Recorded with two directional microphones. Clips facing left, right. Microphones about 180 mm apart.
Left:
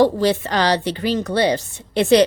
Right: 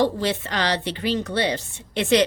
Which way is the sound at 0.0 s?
40° left (ahead or behind).